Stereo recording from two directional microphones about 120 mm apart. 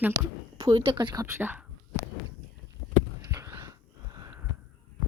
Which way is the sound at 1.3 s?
15° right (ahead or behind).